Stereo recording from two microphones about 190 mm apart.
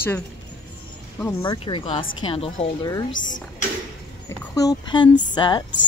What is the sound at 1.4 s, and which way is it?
Speech, 25° left (ahead or behind).